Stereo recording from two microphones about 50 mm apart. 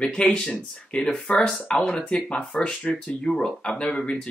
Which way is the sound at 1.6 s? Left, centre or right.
Left.